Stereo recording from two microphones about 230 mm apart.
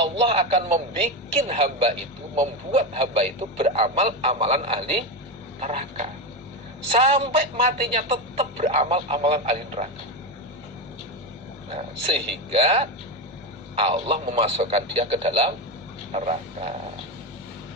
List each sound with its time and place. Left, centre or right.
0.0 s speech: right
11.7 s speech: right